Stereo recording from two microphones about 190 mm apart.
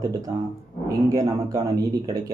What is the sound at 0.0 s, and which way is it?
A man's voice, 20° right (ahead or behind).